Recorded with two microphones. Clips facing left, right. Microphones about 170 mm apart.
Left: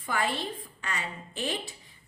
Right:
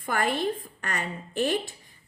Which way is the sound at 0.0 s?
50° right (ahead or behind).